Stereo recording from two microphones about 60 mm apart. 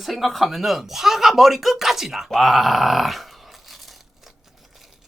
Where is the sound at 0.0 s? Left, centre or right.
Centre.